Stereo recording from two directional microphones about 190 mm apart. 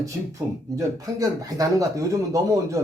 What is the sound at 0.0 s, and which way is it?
Speech, 15° right (ahead or behind).